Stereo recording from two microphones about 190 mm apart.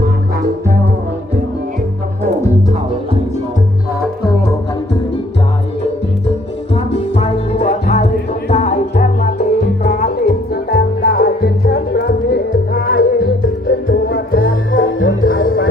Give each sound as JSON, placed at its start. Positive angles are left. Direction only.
{"t": 6.7, "sound": "music", "side_deg": 35}
{"t": 14.7, "sound": "music", "side_deg": 85}
{"t": 15.2, "sound": "music", "side_deg": 50}